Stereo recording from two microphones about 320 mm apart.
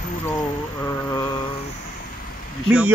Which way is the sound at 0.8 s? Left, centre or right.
Centre.